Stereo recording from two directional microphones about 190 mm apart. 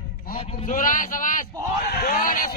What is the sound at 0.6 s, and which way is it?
Speech, 45° left (ahead or behind).